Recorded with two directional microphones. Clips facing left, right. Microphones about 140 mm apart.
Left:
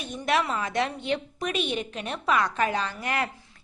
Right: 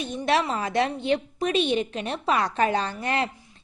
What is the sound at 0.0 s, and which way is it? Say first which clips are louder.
A woman's voice: right 2 dB; 30° right (ahead or behind).